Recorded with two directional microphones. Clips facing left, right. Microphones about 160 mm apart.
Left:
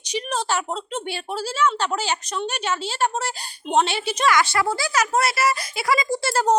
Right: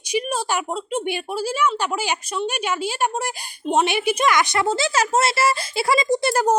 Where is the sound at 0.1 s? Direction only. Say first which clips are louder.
Right 2 dB; 10° right (ahead or behind).